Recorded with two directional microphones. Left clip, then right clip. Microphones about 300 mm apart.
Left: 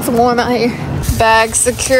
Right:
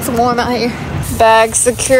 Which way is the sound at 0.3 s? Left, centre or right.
Centre.